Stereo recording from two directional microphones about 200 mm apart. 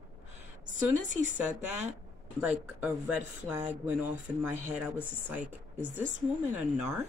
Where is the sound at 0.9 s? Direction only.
40° right (ahead or behind).